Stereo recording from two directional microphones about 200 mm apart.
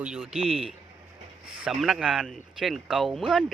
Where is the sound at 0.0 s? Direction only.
5° right (ahead or behind).